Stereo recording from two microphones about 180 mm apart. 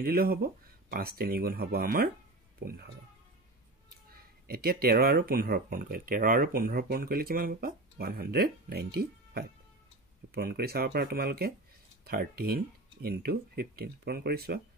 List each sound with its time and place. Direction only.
0.0 s speech: 55° right (ahead or behind)
4.1 s speech: 60° right (ahead or behind)